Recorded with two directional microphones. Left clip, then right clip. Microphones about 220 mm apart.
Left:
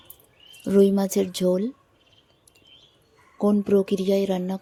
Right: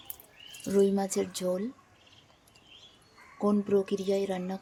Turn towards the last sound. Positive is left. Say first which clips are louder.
# left 7 dB
turn(degrees=25)  # may be behind; listen again after turning